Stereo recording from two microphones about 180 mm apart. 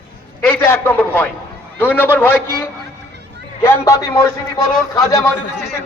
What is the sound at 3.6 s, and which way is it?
A man's voice, 15° left (ahead or behind).